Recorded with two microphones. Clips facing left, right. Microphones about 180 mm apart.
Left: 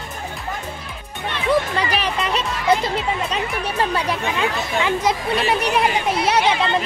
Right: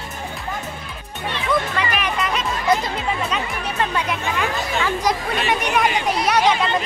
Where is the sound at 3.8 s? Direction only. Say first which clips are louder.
Left 1 dB; 30° left (ahead or behind).